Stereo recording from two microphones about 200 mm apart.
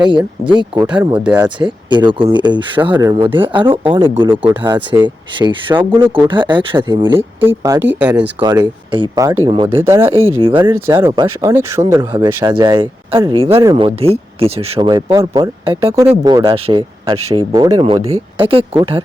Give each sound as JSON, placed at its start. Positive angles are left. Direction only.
{"t": 0.0, "sound": "speech", "side_deg": -20}
{"t": 0.9, "sound": "speech", "side_deg": -5}
{"t": 1.4, "sound": "speech", "side_deg": -25}
{"t": 8.4, "sound": "speech", "side_deg": -20}
{"t": 10.4, "sound": "speech", "side_deg": -25}